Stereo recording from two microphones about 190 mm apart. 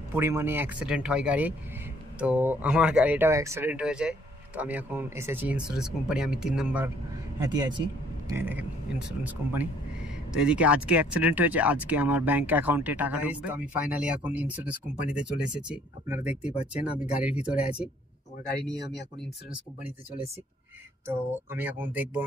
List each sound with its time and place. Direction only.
0.1 s speech: 15° right (ahead or behind)
7.3 s speech: 20° right (ahead or behind)
21.1 s speech: 10° right (ahead or behind)